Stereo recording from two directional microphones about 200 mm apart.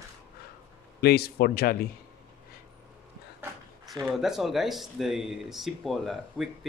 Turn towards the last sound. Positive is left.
turn(degrees=0)  # may be behind; listen again after turning